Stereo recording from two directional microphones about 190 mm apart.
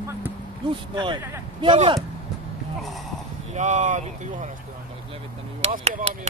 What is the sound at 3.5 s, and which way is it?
Speech, 40° right (ahead or behind).